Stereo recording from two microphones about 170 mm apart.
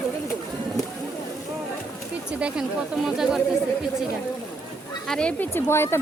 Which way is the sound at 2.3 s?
5° right (ahead or behind).